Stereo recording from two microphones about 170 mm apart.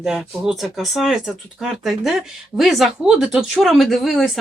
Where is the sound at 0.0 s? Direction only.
5° right (ahead or behind).